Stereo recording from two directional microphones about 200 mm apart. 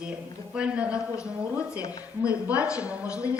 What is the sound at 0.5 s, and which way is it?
Speech, 5° right (ahead or behind).